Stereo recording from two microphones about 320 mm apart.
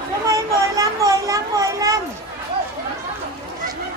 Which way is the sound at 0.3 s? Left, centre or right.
Centre.